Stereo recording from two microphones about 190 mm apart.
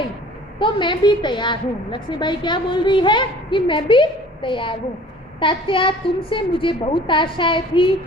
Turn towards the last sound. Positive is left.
turn(degrees=25)  # may be behind; listen again after turning